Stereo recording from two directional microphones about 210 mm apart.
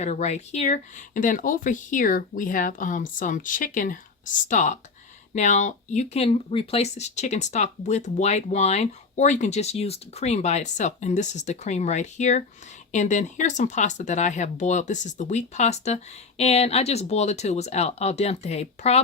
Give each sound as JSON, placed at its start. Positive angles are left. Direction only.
{"t": 0.0, "sound": "speech", "side_deg": 30}